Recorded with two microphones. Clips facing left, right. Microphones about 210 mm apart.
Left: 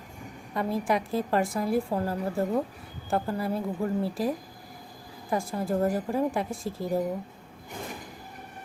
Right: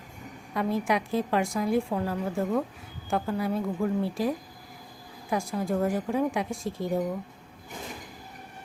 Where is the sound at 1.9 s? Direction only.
30° left (ahead or behind).